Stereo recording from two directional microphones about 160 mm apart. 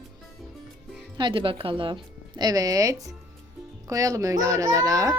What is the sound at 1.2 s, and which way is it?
A woman's voice, 30° right (ahead or behind).